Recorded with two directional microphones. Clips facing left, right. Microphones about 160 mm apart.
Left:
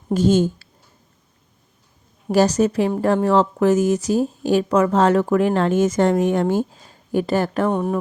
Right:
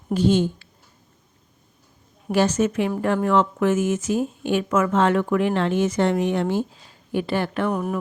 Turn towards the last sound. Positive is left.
turn(degrees=30)  # may be behind; listen again after turning